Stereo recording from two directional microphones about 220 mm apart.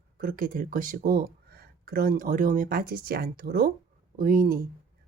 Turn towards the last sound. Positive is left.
turn(degrees=-40)  # may be behind; listen again after turning